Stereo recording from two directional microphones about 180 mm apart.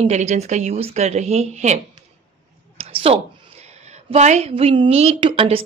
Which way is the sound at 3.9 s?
40° right (ahead or behind).